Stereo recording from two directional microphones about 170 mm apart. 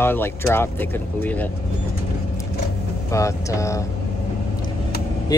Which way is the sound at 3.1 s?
20° left (ahead or behind).